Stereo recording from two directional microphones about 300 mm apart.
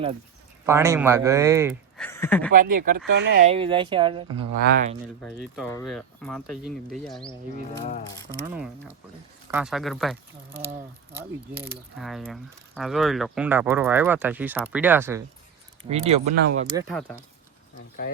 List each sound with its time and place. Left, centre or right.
0.6 s speech: centre
2.0 s speech: centre
2.5 s speech: right
3.4 s speech: centre
5.5 s speech: centre
5.9 s pulleys: centre
8.4 s pulleys: centre
15.9 s speech: right
16.4 s speech: right
16.9 s pulleys: centre